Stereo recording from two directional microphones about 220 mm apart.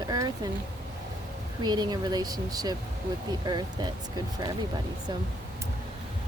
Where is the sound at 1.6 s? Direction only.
20° right (ahead or behind).